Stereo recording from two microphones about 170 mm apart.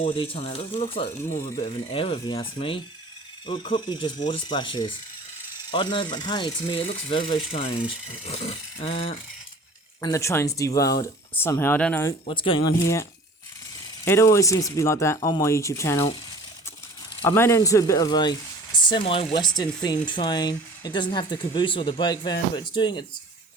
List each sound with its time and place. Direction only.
0.0 s speech: 35° left (ahead or behind)
10.0 s speech: 20° left (ahead or behind)
12.2 s speech: 30° left (ahead or behind)
12.7 s speech: 15° left (ahead or behind)
17.2 s speech: 15° left (ahead or behind)